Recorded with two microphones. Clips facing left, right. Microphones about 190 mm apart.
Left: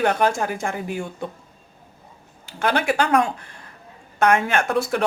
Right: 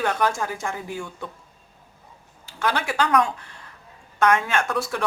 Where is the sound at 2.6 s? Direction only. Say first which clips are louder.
Left 3 dB; 60° left (ahead or behind).